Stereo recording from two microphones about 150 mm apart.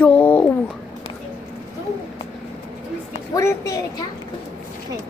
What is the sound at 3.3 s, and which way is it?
Speech, 20° left (ahead or behind).